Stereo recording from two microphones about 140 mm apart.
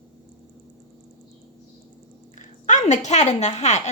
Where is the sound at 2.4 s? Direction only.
60° left (ahead or behind).